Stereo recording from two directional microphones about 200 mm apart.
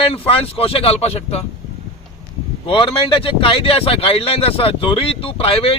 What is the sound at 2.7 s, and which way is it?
Speech, 25° left (ahead or behind).